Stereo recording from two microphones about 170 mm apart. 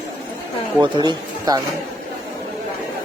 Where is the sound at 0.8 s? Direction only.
25° right (ahead or behind).